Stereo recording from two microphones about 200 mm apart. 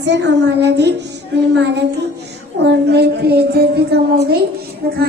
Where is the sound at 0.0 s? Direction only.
60° right (ahead or behind).